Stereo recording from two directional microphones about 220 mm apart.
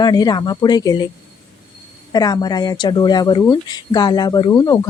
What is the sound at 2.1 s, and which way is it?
Speech, 15° left (ahead or behind).